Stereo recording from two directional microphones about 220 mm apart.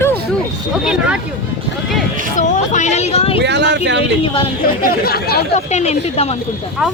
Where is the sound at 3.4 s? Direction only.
50° right (ahead or behind).